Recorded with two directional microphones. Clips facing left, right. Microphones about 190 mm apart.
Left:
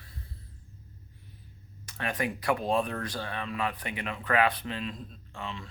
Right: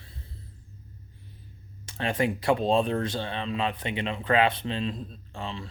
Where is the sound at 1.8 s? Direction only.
25° right (ahead or behind).